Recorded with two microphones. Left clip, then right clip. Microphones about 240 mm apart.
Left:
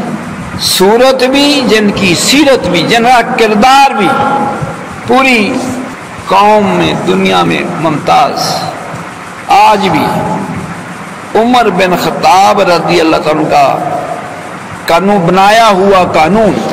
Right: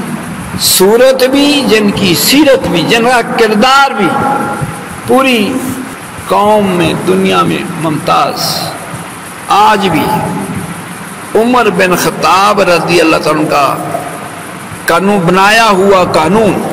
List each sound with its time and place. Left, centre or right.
0.6 s a man's voice: right
5.1 s a man's voice: right
11.3 s a man's voice: right
14.9 s a man's voice: right